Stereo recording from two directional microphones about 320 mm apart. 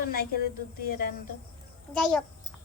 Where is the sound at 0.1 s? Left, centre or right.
Left.